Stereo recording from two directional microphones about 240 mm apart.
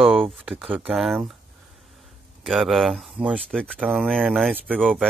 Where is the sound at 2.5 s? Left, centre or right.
Centre.